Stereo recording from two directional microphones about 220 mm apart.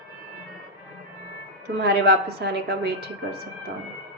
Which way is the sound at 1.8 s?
45° right (ahead or behind).